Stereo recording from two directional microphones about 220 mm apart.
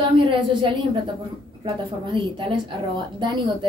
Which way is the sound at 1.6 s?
20° right (ahead or behind).